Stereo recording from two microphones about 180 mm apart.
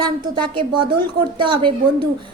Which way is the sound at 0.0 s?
25° right (ahead or behind).